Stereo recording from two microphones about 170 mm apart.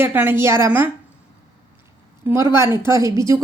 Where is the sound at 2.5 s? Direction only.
15° right (ahead or behind).